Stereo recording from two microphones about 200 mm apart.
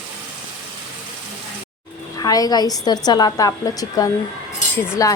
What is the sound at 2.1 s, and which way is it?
A woman's voice, 20° left (ahead or behind).